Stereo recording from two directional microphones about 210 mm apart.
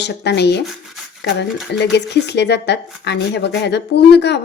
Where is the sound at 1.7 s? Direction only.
55° left (ahead or behind).